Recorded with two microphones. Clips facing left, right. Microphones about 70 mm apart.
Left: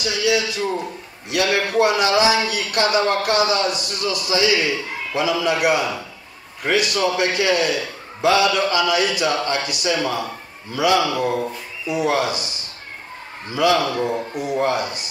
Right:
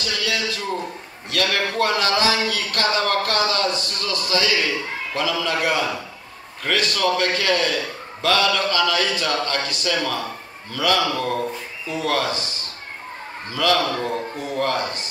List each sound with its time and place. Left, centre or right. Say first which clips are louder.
0.0 s a man's voice: left 5 dB; centre
13.5 s a man's voice: left 2 dB; centre